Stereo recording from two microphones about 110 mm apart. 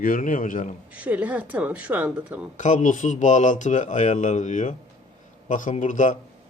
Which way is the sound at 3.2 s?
90° left.